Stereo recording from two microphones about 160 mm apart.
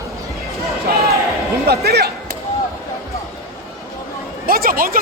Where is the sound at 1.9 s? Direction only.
85° right.